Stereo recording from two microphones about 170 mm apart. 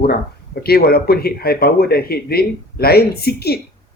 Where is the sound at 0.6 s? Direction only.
65° left (ahead or behind).